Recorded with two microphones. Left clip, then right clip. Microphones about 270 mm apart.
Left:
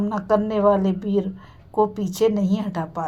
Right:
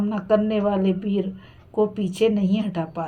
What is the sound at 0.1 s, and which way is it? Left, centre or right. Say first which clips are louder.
Speech: even; left.